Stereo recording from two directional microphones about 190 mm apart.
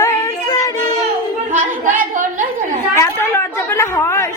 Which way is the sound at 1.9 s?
45° right (ahead or behind).